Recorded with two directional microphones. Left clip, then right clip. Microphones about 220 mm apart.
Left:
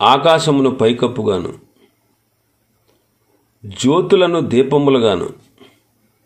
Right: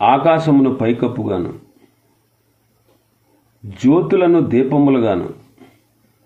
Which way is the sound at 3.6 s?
30° left (ahead or behind).